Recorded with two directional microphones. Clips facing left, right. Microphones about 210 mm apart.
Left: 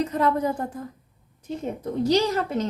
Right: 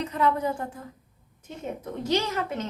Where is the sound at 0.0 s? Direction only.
40° left (ahead or behind).